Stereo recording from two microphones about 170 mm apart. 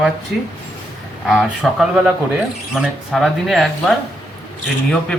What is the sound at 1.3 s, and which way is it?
Speech, centre (ahead or behind).